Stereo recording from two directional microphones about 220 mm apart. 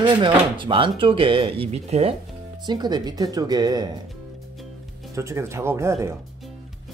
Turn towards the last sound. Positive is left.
turn(degrees=-10)  # may be behind; listen again after turning